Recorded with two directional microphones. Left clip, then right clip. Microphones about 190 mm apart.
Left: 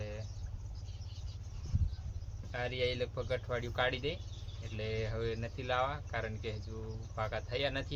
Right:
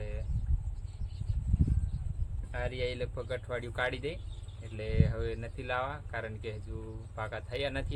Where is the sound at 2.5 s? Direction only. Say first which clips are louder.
Even; 15° right (ahead or behind).